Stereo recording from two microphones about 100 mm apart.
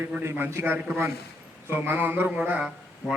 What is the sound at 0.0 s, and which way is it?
A man's voice, 25° right (ahead or behind).